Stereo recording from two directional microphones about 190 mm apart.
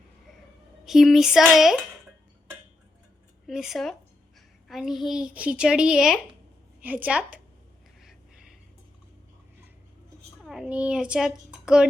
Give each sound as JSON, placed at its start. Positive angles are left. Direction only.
{"t": 0.9, "sound": "a woman's voice", "side_deg": 0}
{"t": 3.4, "sound": "a woman's voice", "side_deg": 0}
{"t": 10.4, "sound": "a child's voice", "side_deg": 0}